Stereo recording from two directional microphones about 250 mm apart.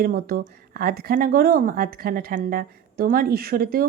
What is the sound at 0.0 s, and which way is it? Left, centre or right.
Speech, right.